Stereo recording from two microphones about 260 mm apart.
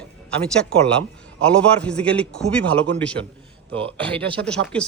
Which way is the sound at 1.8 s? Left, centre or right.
Centre.